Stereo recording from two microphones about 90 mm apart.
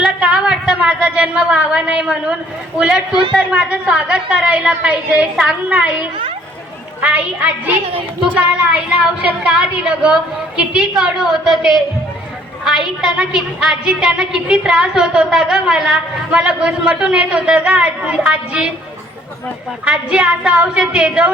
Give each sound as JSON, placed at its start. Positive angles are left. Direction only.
{"t": 0.0, "sound": "a woman's voice", "side_deg": -10}
{"t": 8.7, "sound": "a woman's voice", "side_deg": -15}
{"t": 19.8, "sound": "a woman's voice", "side_deg": -10}